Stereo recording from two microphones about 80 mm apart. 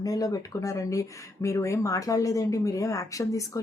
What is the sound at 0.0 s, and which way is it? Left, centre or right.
A woman's voice, left.